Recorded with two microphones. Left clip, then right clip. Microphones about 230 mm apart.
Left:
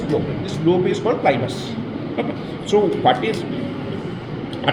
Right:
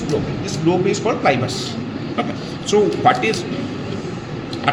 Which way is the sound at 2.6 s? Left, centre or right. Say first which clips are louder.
Right 1 dB; right.